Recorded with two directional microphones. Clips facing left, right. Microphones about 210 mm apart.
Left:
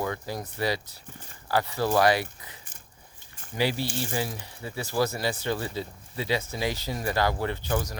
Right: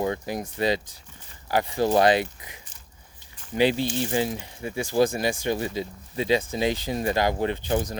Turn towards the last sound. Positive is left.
turn(degrees=-20)  # may be behind; listen again after turning